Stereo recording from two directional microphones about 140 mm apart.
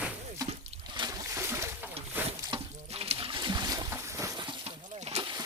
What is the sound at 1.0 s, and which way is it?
Splash, 35° right (ahead or behind).